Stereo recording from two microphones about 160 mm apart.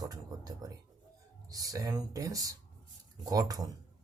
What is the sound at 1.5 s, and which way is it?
Speech, 25° right (ahead or behind).